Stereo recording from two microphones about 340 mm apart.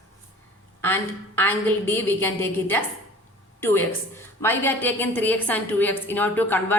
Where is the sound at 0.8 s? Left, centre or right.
Centre.